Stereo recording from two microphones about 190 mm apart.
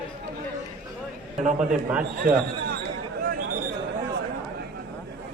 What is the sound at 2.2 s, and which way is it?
Speech, 50° right (ahead or behind).